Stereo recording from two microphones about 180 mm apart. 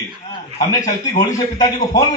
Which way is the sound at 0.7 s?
20° left (ahead or behind).